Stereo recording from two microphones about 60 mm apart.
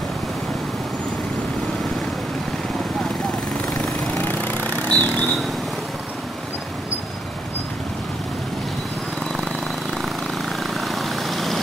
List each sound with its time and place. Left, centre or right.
3.7 s vehicle: centre
4.2 s vehicle: left
10.6 s vehicle: centre